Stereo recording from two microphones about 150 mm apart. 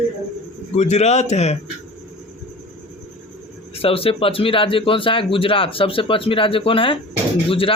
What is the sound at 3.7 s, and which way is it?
Speech, 40° left (ahead or behind).